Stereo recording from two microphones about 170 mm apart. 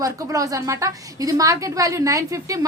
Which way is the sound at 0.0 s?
20° right (ahead or behind).